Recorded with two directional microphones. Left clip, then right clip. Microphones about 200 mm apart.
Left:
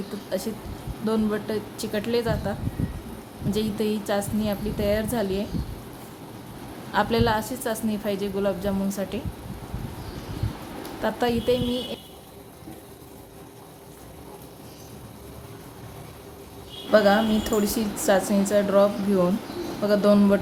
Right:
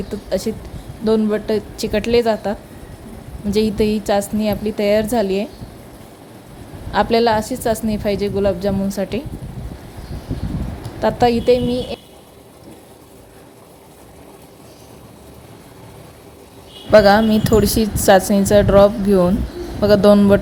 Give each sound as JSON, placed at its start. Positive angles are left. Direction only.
{"t": 0.3, "sound": "a woman's voice", "side_deg": -30}
{"t": 6.9, "sound": "a woman's voice", "side_deg": -30}
{"t": 11.0, "sound": "a woman's voice", "side_deg": -30}
{"t": 16.9, "sound": "a woman's voice", "side_deg": -40}